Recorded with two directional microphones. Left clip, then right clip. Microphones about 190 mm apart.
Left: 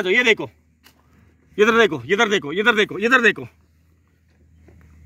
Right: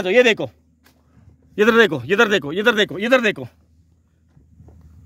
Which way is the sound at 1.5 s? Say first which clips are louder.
Right 1 dB; 65° right (ahead or behind).